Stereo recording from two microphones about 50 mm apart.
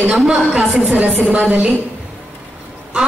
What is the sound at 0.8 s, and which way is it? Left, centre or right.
Speech, right.